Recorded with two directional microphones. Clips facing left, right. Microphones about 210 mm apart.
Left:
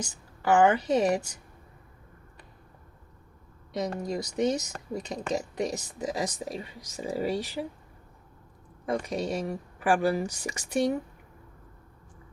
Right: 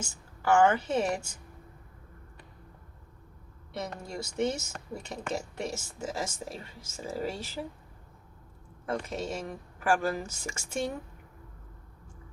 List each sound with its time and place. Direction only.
0.0 s speech: 20° left (ahead or behind)
4.0 s speech: 15° left (ahead or behind)
8.9 s speech: 15° left (ahead or behind)